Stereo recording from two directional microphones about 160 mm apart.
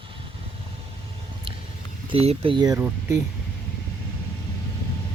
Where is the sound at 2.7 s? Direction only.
10° right (ahead or behind).